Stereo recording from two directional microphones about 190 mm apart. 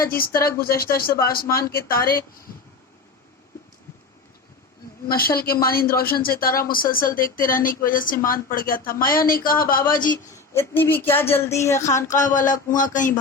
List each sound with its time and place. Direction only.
0.0 s speech: 50° left (ahead or behind)
5.0 s speech: 50° left (ahead or behind)
10.3 s speech: 15° left (ahead or behind)
12.0 s speech: 40° left (ahead or behind)